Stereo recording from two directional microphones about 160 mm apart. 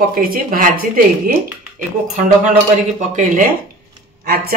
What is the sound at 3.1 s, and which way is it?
Speech, 55° right (ahead or behind).